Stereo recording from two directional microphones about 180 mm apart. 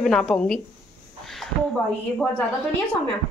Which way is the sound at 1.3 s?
Centre (ahead or behind).